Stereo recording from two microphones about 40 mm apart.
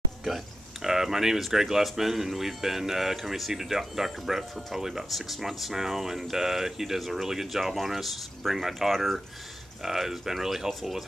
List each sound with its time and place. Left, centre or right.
0.8 s speech: centre
9.8 s speech: centre